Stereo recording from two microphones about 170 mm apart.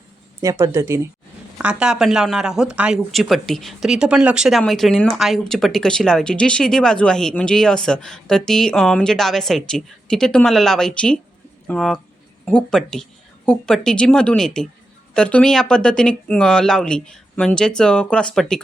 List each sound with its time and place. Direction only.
0.4 s speech: 15° right (ahead or behind)
1.5 s speech: 5° right (ahead or behind)